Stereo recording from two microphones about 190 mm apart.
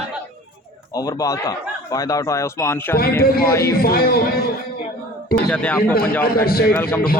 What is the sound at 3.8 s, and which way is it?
Speech, 55° left (ahead or behind).